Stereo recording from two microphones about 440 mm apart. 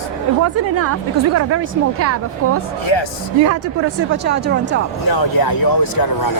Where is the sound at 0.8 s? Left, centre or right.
Right.